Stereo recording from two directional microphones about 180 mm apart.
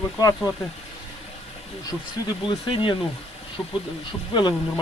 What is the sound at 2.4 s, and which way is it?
Speech, 30° left (ahead or behind).